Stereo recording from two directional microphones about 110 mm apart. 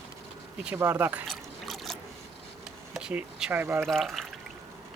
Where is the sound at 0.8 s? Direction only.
20° right (ahead or behind).